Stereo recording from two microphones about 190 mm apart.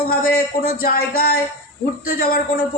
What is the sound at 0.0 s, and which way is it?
Speech, 50° left (ahead or behind).